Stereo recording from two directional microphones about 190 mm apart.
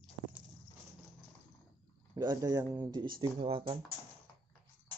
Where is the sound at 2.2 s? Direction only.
20° right (ahead or behind).